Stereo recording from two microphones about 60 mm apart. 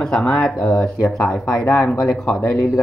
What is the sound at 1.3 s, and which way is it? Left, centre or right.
Speech, centre.